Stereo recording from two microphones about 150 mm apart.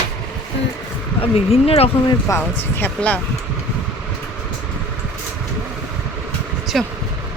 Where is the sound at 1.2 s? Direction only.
40° left (ahead or behind).